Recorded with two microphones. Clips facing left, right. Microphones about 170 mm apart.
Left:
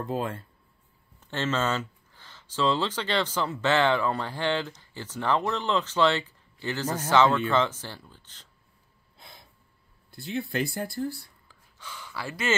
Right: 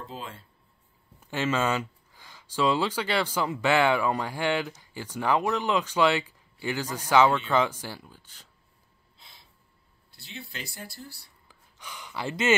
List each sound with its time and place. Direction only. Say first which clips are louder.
0.0 s speech: left 9 dB; 55° left (ahead or behind)
1.2 s speech: right 1 dB; 10° right (ahead or behind)
9.1 s gasp: left 6 dB; 50° left (ahead or behind)
10.1 s speech: left 12 dB; 50° left (ahead or behind)
11.4 s gasp: right 5 dB; 15° right (ahead or behind)